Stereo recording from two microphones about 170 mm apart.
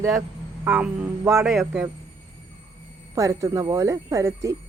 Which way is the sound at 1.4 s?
Centre (ahead or behind).